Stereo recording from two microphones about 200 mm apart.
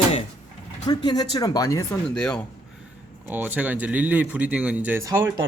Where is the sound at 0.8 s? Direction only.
20° left (ahead or behind).